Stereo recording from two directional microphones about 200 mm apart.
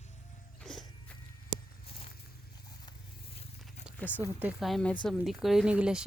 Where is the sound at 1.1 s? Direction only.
5° left (ahead or behind).